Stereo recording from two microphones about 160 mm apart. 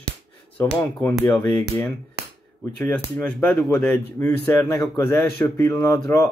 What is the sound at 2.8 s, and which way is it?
A man's voice, 10° left (ahead or behind).